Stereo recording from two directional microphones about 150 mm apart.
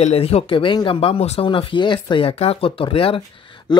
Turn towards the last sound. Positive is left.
turn(degrees=25)  # may be behind; listen again after turning